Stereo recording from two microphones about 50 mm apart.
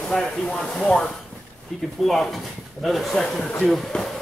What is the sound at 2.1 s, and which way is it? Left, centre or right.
Speech, centre.